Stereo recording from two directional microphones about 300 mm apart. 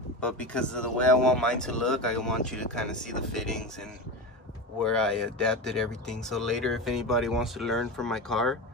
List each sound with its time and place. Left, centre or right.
0.2 s speech: centre